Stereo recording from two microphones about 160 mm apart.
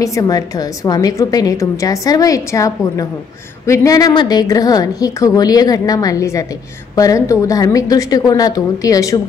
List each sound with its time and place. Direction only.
0.0 s a woman's voice: 20° left (ahead or behind)